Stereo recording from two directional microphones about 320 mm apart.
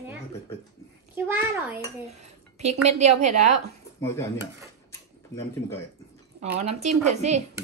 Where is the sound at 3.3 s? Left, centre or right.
Right.